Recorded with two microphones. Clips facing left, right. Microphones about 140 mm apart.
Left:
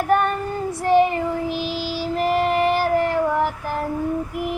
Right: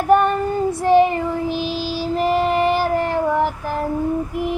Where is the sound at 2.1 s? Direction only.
30° right (ahead or behind).